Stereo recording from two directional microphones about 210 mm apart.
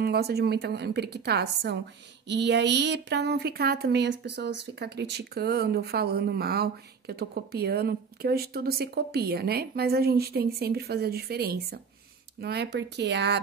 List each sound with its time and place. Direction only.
0.0 s speech: 50° right (ahead or behind)